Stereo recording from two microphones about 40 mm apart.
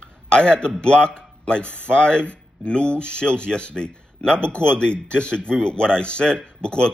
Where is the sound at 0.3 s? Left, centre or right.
Left.